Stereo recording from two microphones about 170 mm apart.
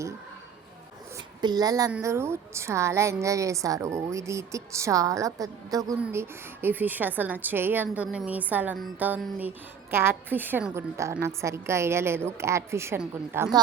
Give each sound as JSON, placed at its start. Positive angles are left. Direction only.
{"t": 1.4, "sound": "a woman's voice", "side_deg": -25}